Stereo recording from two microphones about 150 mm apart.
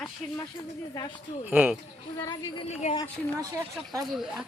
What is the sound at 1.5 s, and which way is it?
Speech, 10° right (ahead or behind).